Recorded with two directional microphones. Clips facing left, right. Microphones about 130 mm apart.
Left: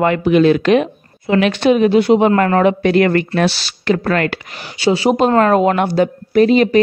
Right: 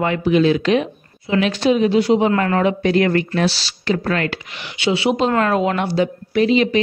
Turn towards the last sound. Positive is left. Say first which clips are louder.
# left 5 dB
turn(degrees=45)  # may be behind; listen again after turning